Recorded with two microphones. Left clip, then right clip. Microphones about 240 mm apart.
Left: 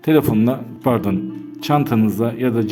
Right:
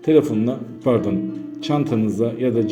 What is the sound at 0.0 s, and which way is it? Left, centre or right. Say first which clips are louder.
A man's voice: left 1 dB; left.